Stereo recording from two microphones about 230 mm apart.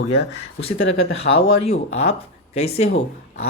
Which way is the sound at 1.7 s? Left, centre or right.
Left.